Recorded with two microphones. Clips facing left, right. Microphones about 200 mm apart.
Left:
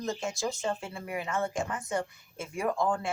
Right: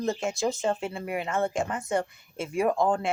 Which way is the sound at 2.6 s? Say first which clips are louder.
Right 5 dB; 20° right (ahead or behind).